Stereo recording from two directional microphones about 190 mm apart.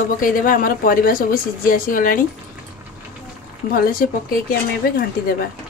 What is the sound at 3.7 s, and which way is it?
Speech, 50° left (ahead or behind).